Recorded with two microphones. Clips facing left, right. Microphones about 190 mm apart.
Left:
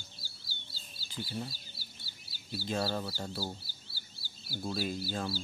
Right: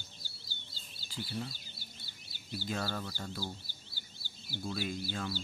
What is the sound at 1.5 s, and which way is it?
Bird vocalization, 40° left (ahead or behind).